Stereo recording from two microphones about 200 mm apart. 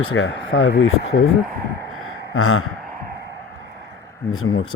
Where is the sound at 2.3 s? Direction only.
90° left.